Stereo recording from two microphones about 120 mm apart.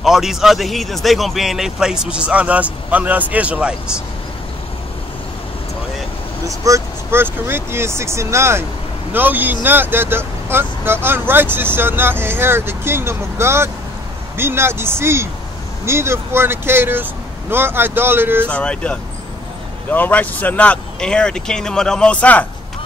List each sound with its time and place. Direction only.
0.0 s speech: 5° right (ahead or behind)
6.4 s speech: 30° right (ahead or behind)
18.5 s speech: 10° left (ahead or behind)